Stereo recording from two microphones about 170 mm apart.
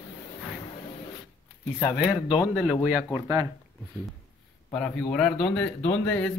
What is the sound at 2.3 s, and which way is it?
Speech, 5° right (ahead or behind).